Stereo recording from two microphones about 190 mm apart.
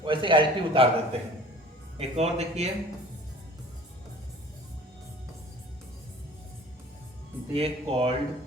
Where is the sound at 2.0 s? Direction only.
35° right (ahead or behind).